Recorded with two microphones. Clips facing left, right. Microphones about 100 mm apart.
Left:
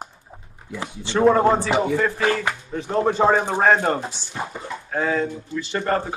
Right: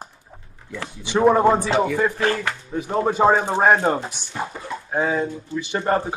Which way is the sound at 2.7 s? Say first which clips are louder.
Even; 10° right (ahead or behind).